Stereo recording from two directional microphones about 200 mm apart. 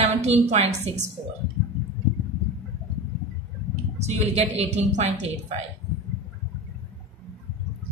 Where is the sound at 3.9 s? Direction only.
35° right (ahead or behind).